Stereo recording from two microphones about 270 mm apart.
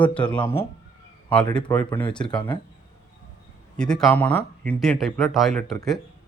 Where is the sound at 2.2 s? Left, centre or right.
Centre.